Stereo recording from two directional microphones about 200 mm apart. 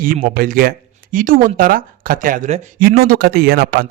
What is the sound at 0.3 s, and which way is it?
Speech, 45° right (ahead or behind).